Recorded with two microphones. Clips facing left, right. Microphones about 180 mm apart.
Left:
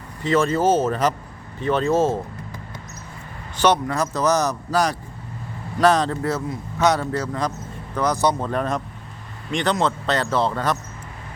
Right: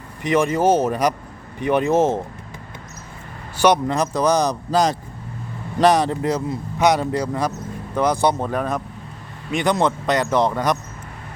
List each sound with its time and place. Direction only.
0.2 s speech: 15° right (ahead or behind)
3.8 s speech: 20° right (ahead or behind)